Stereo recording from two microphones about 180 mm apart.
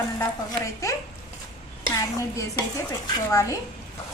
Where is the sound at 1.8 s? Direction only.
20° left (ahead or behind).